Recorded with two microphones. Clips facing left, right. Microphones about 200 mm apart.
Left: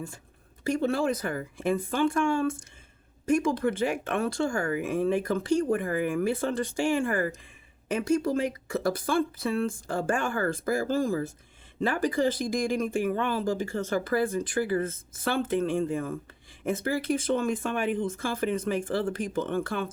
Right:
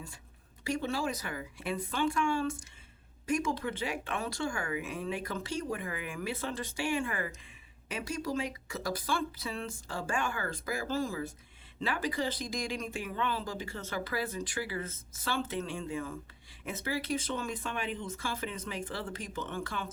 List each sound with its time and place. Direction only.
0.7 s speech: 55° left (ahead or behind)